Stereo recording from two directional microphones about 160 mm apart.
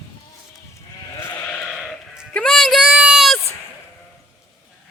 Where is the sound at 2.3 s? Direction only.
5° left (ahead or behind).